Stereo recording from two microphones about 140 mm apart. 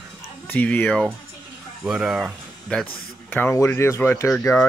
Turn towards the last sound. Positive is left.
turn(degrees=10)  # may be behind; listen again after turning